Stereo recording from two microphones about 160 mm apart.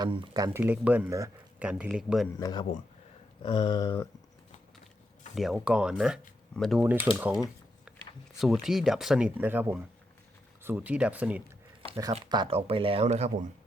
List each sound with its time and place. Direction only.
0.0 s speech: 30° right (ahead or behind); by 2.2 s 5° right (ahead or behind)
2.4 s a sound: 25° left (ahead or behind)
5.3 s speech: centre (ahead or behind)
6.8 s speech: 15° right (ahead or behind)
7.9 s a sound: 5° right (ahead or behind)
8.6 s speech: centre (ahead or behind)
12.1 s speech: 30° right (ahead or behind)